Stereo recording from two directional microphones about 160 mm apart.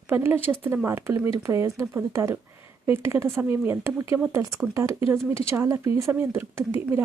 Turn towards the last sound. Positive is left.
turn(degrees=-15)  # may be behind; listen again after turning